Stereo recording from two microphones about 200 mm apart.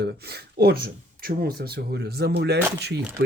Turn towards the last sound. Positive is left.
turn(degrees=-50)  # may be behind; listen again after turning